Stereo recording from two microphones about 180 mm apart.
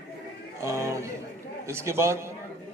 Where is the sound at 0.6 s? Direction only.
15° right (ahead or behind).